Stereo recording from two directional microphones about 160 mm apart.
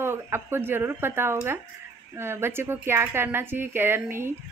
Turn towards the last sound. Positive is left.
turn(degrees=-15)  # may be behind; listen again after turning